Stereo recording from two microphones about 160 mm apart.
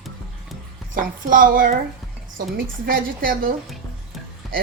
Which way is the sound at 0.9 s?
60° right (ahead or behind).